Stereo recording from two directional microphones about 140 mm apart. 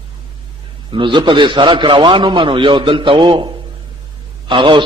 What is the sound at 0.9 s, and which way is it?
A man's voice, 35° right (ahead or behind).